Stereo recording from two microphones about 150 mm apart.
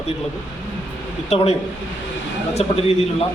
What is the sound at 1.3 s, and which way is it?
Speech, 45° left (ahead or behind).